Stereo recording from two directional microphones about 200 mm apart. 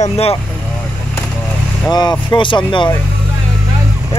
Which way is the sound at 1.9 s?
20° left (ahead or behind).